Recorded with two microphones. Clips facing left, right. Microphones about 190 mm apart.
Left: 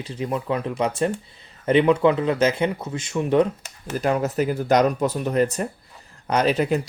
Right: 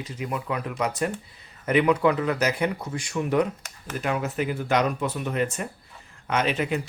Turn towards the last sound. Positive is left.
turn(degrees=40)  # may be behind; listen again after turning